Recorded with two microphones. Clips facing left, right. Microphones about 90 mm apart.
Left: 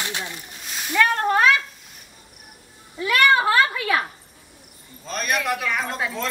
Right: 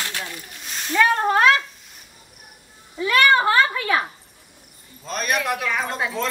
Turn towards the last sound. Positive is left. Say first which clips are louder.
# right 2 dB
turn(degrees=0)  # may be behind; listen again after turning